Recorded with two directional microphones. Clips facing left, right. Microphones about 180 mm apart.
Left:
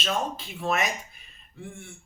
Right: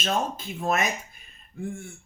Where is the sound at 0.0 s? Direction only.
45° right (ahead or behind).